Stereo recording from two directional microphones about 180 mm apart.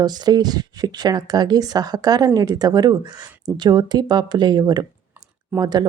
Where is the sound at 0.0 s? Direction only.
20° right (ahead or behind).